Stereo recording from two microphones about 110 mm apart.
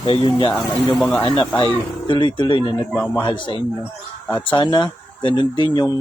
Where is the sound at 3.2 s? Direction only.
45° left (ahead or behind).